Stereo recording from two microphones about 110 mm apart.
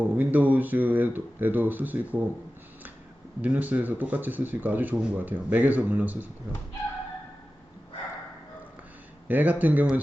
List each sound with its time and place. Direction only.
0.0 s speech: 15° right (ahead or behind)
3.4 s speech: 15° right (ahead or behind)
9.2 s speech: 15° right (ahead or behind)